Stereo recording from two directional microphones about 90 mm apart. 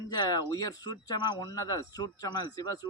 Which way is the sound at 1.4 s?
40° left (ahead or behind).